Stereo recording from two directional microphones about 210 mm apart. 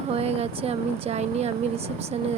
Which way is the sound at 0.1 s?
30° right (ahead or behind).